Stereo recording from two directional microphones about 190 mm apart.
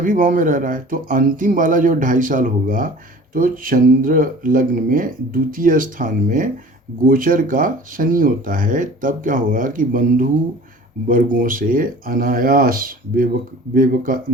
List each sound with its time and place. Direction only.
0.0 s speech: 45° right (ahead or behind)